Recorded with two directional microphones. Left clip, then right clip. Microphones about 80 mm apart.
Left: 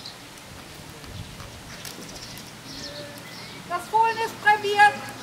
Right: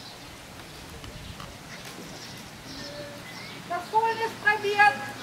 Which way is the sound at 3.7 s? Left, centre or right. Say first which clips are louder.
Left 3 dB; left.